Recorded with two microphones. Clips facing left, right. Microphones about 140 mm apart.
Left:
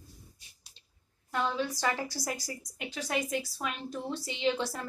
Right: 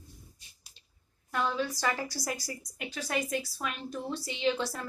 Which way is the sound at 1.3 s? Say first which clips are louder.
Even; 20° left (ahead or behind).